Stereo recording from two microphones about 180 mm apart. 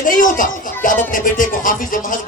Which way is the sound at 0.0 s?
50° left (ahead or behind).